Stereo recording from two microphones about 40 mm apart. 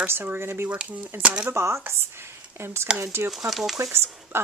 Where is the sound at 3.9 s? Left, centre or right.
Right.